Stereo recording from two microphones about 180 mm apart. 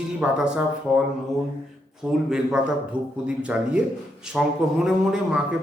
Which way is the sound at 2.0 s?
5° right (ahead or behind).